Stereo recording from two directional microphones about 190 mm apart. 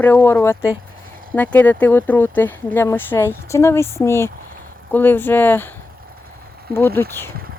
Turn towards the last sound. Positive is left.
turn(degrees=10)  # may be behind; listen again after turning